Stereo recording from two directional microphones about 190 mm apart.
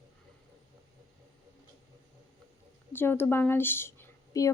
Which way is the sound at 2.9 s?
10° left (ahead or behind).